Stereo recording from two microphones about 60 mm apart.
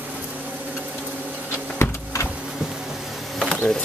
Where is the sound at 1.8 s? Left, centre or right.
Left.